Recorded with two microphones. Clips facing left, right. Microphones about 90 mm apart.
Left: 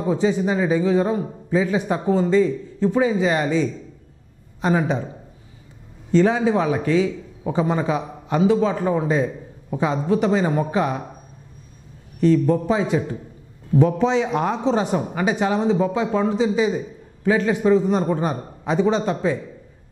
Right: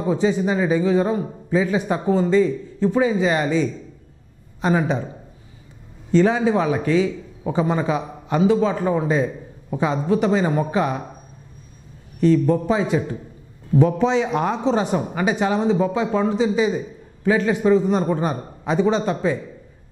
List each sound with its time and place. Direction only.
0.0 s a man's voice: 20° right (ahead or behind)
6.1 s a man's voice: 20° right (ahead or behind)
12.2 s a man's voice: 20° right (ahead or behind)